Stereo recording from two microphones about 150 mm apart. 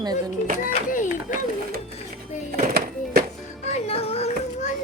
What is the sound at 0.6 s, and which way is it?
Speech, 60° left (ahead or behind).